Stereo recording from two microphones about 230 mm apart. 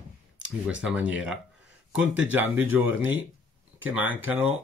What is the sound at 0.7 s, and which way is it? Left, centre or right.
Speech, centre.